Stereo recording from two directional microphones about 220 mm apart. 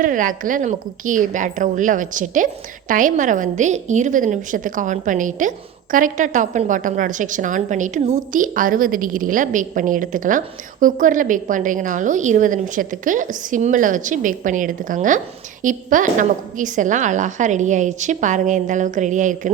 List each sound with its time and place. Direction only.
0.0 s a woman's voice: 35° right (ahead or behind)